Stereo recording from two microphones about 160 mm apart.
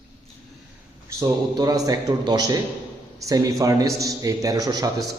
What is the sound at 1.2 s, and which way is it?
A man's voice, 20° right (ahead or behind).